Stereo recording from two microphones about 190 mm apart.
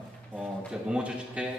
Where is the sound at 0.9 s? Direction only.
5° right (ahead or behind).